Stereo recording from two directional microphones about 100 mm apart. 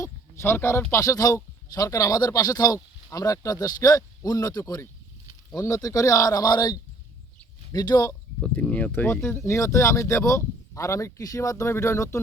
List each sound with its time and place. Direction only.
0.0 s a sound: 25° left (ahead or behind)
0.9 s speech: 30° left (ahead or behind)
8.6 s speech: 15° left (ahead or behind)
9.4 s speech: 30° left (ahead or behind)